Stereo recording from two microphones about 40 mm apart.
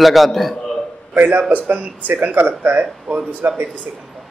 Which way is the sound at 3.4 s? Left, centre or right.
Right.